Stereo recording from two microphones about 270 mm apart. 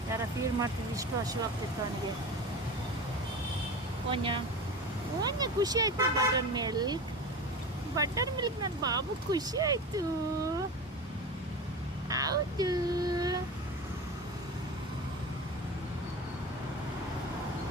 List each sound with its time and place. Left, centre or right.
0.6 s speech: centre
4.1 s speech: centre
5.4 s speech: centre
12.0 s speech: centre